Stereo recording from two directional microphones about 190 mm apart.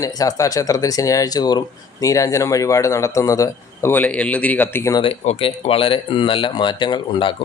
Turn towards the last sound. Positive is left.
turn(degrees=25)  # may be behind; listen again after turning